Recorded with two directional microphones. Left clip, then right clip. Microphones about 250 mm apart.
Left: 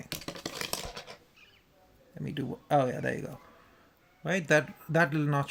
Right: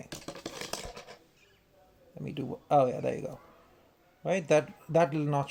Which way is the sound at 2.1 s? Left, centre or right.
Left.